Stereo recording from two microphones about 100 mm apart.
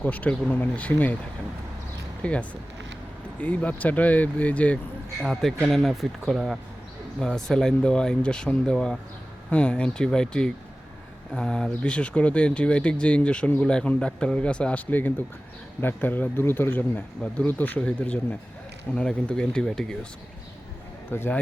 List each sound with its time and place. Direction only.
0.0 s speech: 15° left (ahead or behind)
2.2 s speech: 15° left (ahead or behind)
5.2 s speech: centre (ahead or behind)
21.1 s speech: 20° left (ahead or behind)